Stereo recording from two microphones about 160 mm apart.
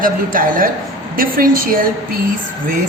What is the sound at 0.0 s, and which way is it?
A woman's voice, 60° right (ahead or behind).